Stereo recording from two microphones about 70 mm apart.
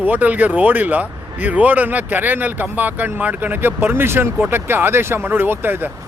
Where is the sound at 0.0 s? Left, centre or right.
Right.